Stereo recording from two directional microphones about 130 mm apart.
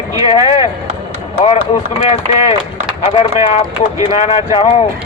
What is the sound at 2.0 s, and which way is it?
Speech, 60° left (ahead or behind).